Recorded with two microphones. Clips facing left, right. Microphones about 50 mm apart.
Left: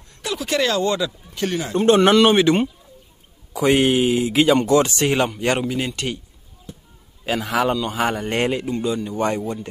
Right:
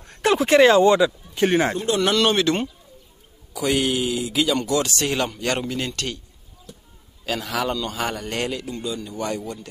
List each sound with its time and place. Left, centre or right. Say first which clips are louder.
0.0 s speech: right 8 dB; right
1.8 s a man's voice: left 8 dB; left
2.0 s speech: left 5 dB; centre
3.5 s speech: left 5 dB; left